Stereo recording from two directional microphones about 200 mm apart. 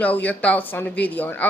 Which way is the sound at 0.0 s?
10° left (ahead or behind).